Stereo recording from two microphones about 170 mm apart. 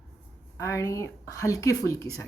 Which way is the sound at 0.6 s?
20° left (ahead or behind).